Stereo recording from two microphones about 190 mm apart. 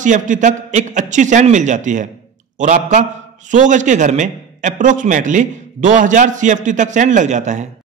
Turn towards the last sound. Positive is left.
turn(degrees=-40)  # may be behind; listen again after turning